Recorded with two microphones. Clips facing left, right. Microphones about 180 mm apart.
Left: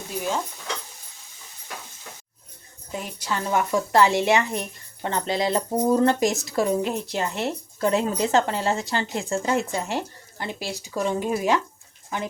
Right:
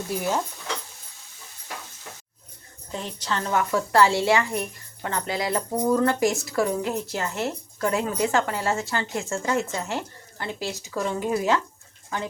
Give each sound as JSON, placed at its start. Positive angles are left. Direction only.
{"t": 2.9, "sound": "speech", "side_deg": 10}